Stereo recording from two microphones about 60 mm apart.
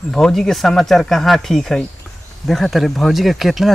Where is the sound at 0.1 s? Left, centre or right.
Centre.